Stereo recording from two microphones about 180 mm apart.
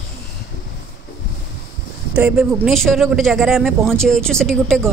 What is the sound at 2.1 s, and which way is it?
A man's voice, 5° right (ahead or behind).